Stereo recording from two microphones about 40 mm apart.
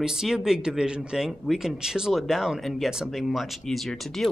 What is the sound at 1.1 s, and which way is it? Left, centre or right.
Speech, centre.